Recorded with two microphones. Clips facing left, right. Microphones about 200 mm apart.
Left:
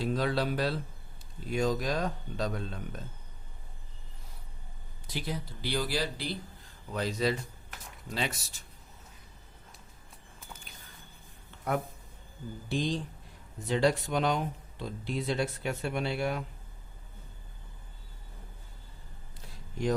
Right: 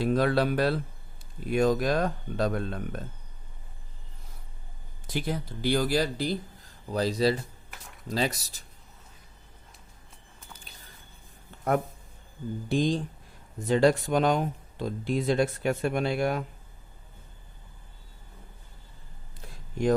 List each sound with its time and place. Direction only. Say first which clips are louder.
0.0 s speech: right 6 dB; 60° right (ahead or behind)
5.0 s speech: right 5 dB; 50° right (ahead or behind)
12.6 s speech: right 5 dB; 45° right (ahead or behind)